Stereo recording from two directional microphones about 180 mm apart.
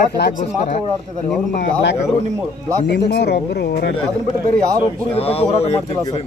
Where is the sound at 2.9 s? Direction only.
65° left (ahead or behind).